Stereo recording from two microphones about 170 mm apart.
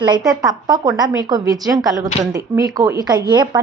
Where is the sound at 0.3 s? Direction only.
20° right (ahead or behind).